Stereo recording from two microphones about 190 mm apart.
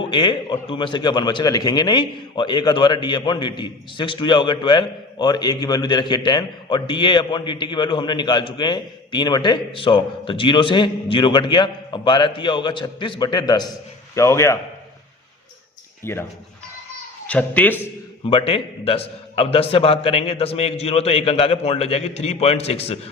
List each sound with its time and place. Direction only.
0.0 s a man's voice: 25° left (ahead or behind)
16.0 s a man's voice: 15° left (ahead or behind)
17.2 s a man's voice: 5° left (ahead or behind)
18.3 s a man's voice: 30° left (ahead or behind)